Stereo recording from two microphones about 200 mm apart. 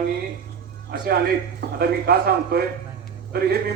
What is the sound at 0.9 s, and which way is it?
A man's voice, 50° right (ahead or behind).